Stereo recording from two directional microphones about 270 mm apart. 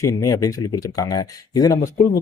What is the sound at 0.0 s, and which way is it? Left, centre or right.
Speech, centre.